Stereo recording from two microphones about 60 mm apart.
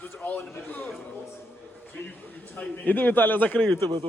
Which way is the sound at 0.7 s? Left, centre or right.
Left.